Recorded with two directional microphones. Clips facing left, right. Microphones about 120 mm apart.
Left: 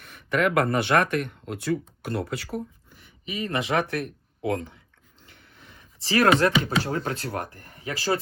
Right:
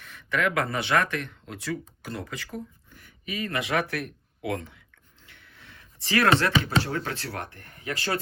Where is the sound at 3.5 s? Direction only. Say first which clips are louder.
Left 3 dB; 35° left (ahead or behind).